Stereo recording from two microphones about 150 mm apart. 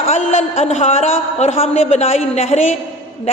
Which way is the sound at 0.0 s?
50° left (ahead or behind).